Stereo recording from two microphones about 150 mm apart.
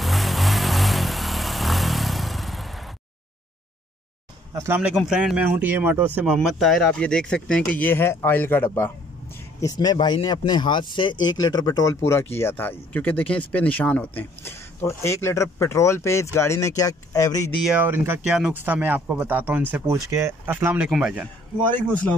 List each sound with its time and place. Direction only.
0.0 s vehicle: centre (ahead or behind)
4.6 s speech: 15° right (ahead or behind)
4.9 s speech: 5° right (ahead or behind)
6.3 s speech: centre (ahead or behind)
9.6 s speech: 25° left (ahead or behind)
17.6 s speech: 15° right (ahead or behind)
21.5 s speech: 10° left (ahead or behind)